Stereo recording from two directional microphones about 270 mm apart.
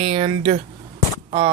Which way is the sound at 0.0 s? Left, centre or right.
Right.